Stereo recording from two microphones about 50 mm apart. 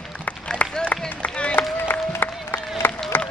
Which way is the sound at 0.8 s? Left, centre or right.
Left.